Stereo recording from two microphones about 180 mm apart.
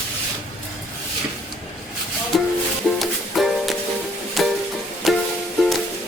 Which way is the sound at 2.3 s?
Centre (ahead or behind).